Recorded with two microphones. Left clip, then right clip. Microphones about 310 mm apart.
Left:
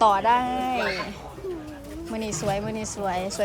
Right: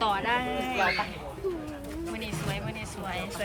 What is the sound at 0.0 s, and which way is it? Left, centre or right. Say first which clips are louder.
Speech: left 8 dB; centre.